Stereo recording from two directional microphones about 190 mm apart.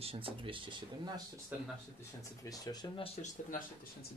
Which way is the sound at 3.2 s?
45° left (ahead or behind).